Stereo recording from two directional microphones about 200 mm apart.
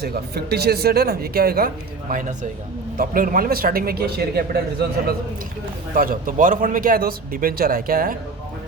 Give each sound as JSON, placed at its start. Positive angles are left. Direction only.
{"t": 0.0, "sound": "speech", "side_deg": -50}